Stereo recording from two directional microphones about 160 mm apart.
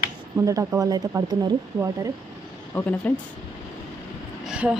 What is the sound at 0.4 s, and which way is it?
Speech, 20° right (ahead or behind).